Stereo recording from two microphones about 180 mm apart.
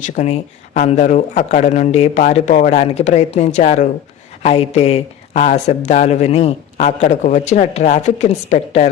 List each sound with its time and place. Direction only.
0.0 s speech: 40° left (ahead or behind)